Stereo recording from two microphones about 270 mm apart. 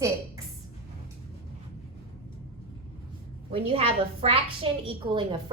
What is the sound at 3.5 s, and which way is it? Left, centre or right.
A woman's voice, right.